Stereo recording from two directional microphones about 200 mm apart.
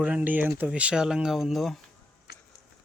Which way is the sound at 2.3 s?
55° left (ahead or behind).